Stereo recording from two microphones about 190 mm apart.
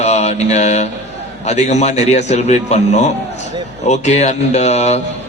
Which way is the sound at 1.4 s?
35° left (ahead or behind).